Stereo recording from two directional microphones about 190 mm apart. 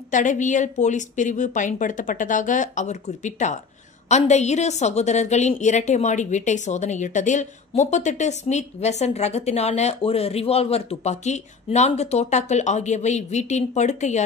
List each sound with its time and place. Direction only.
0.1 s a woman's voice: 40° left (ahead or behind)